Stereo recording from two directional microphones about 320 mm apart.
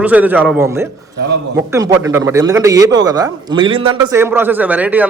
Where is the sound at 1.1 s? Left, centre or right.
Right.